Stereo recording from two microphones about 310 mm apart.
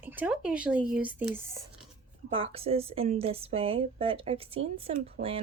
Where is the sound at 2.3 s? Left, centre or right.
Centre.